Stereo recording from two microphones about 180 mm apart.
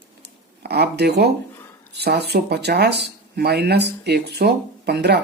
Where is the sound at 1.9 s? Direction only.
65° right (ahead or behind).